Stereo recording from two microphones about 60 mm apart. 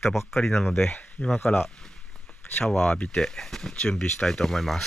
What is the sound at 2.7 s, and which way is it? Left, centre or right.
Speech, centre.